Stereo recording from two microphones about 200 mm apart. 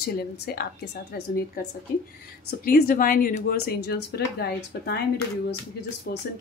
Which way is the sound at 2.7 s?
45° left (ahead or behind).